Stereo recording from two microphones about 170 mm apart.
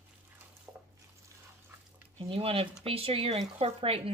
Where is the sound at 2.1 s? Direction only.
35° right (ahead or behind).